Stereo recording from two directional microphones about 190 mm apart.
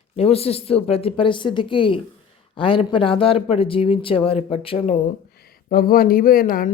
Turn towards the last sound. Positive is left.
turn(degrees=50)  # may be behind; listen again after turning